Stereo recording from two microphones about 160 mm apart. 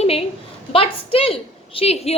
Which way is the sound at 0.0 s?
40° left (ahead or behind).